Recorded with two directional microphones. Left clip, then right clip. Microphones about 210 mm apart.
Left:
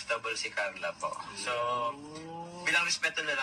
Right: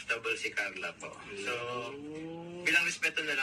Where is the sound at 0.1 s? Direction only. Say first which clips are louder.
Even; 10° left (ahead or behind).